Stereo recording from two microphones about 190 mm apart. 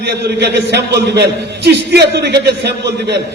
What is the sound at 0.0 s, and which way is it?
A man's voice, 60° right (ahead or behind).